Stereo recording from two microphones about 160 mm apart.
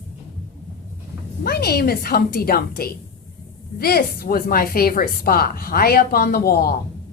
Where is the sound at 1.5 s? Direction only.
75° left (ahead or behind).